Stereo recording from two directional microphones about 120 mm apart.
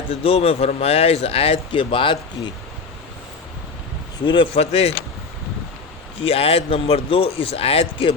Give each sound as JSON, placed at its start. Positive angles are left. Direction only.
{"t": 0.1, "sound": "speech", "side_deg": 55}
{"t": 4.5, "sound": "speech", "side_deg": 60}
{"t": 6.2, "sound": "speech", "side_deg": 55}